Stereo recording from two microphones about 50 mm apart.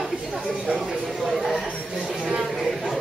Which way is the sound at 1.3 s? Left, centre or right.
Centre.